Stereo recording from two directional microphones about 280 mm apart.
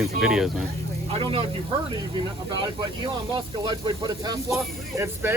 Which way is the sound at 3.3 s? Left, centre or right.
Centre.